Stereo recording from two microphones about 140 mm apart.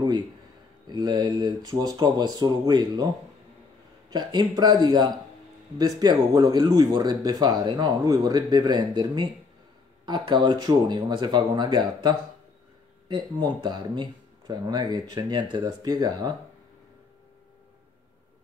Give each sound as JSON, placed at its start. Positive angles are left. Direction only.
{"t": 0.8, "sound": "speech", "side_deg": -30}
{"t": 4.1, "sound": "speech", "side_deg": -30}